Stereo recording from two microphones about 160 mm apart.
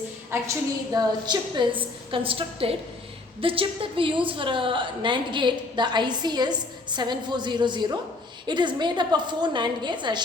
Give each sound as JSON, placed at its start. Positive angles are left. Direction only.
{"t": 0.3, "sound": "a woman's voice", "side_deg": -15}
{"t": 0.9, "sound": "a woman's voice", "side_deg": -30}